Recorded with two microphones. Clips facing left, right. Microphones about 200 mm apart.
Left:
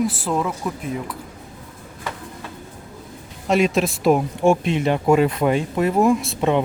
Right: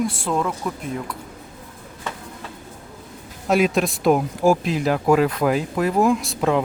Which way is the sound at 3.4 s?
Centre (ahead or behind).